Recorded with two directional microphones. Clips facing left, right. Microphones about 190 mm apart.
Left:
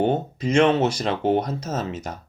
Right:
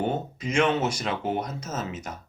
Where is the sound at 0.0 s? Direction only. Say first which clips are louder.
Left 6 dB; 35° left (ahead or behind).